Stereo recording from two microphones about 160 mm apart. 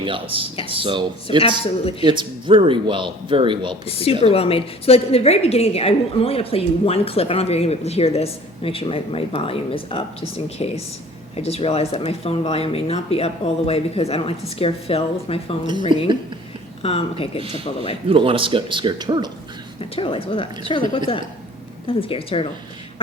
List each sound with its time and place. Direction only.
0.0 s speech: 30° right (ahead or behind)
1.4 s a woman's voice: 35° left (ahead or behind)
2.0 s speech: 30° right (ahead or behind)
3.8 s a woman's voice: 40° left (ahead or behind)
16.8 s a woman's voice: 40° left (ahead or behind)
18.1 s speech: 35° right (ahead or behind)
20.0 s a woman's voice: 35° left (ahead or behind)
21.8 s a woman's voice: 35° left (ahead or behind)